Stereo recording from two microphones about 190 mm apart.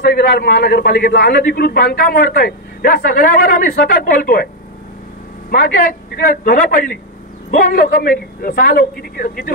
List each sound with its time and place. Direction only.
0.0 s a man's voice: 55° left (ahead or behind)
5.5 s a man's voice: 50° left (ahead or behind)